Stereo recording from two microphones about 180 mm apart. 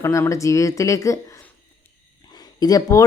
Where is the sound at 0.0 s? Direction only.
15° left (ahead or behind).